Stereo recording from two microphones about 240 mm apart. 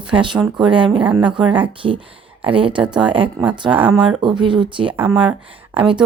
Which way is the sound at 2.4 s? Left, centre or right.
Right.